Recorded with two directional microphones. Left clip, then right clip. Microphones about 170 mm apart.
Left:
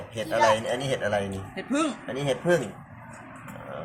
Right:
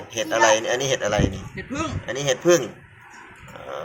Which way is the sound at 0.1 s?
25° right (ahead or behind).